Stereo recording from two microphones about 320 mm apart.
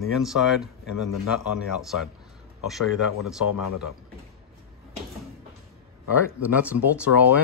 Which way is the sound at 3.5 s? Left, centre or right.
Left.